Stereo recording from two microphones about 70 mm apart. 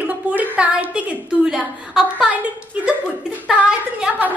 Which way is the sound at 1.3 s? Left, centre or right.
Centre.